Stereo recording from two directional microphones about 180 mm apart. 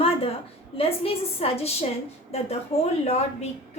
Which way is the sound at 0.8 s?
35° left (ahead or behind).